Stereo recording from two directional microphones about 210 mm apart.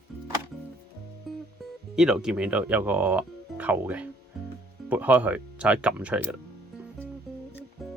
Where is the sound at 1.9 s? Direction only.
5° right (ahead or behind).